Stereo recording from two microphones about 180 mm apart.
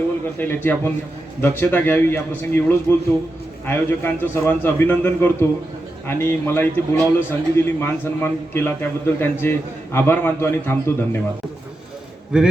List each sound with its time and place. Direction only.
0.3 s a man's voice: 10° left (ahead or behind)